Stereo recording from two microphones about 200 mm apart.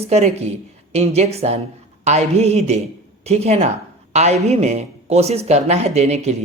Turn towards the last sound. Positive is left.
turn(degrees=-35)  # may be behind; listen again after turning